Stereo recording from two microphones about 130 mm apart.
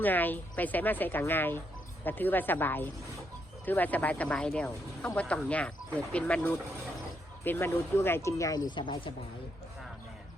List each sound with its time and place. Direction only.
0.0 s speech: 15° left (ahead or behind)
8.7 s speech: 35° left (ahead or behind)